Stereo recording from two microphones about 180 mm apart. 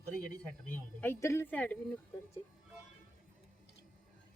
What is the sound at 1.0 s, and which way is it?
Speech, 15° left (ahead or behind).